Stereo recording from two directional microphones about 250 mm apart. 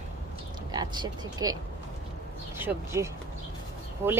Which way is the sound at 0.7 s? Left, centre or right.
Centre.